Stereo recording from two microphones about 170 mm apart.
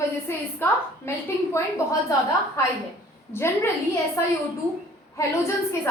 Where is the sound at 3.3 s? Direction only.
15° left (ahead or behind).